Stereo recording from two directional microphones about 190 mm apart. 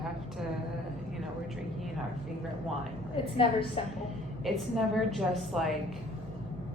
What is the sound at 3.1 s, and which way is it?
Speech, 30° left (ahead or behind).